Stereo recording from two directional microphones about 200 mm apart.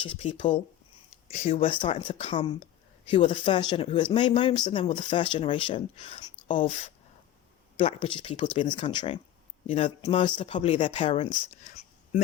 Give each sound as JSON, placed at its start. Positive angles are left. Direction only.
{"t": 0.0, "sound": "speech", "side_deg": 25}
{"t": 10.5, "sound": "speech", "side_deg": 35}
{"t": 11.6, "sound": "a sound", "side_deg": 35}